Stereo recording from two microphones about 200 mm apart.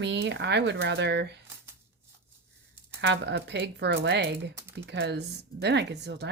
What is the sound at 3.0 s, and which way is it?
A woman's voice, 60° right (ahead or behind).